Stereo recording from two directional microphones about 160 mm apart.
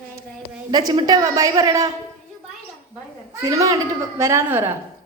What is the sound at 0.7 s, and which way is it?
A man's voice, 25° right (ahead or behind).